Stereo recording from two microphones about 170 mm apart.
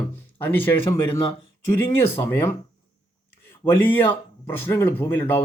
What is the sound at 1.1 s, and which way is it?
Speech, 35° left (ahead or behind).